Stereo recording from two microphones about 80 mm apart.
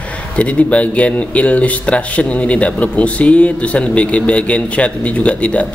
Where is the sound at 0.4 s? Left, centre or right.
Centre.